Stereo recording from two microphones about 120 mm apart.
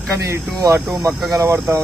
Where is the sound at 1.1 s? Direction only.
Centre (ahead or behind).